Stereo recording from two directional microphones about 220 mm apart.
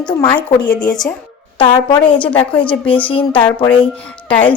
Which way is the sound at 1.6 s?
20° left (ahead or behind).